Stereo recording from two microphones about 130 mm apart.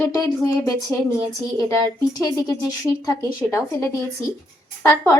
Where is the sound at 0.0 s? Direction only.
25° left (ahead or behind).